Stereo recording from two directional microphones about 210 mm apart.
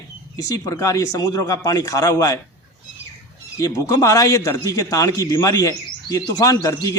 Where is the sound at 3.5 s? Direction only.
15° left (ahead or behind).